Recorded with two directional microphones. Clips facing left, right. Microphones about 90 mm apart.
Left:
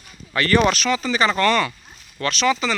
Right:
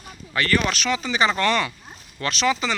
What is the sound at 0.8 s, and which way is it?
Speech, 15° right (ahead or behind).